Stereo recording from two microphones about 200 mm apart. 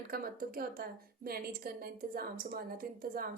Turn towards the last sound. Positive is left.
turn(degrees=-45)  # may be behind; listen again after turning